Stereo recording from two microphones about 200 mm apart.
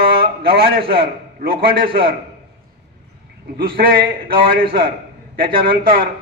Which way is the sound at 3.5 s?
50° right (ahead or behind).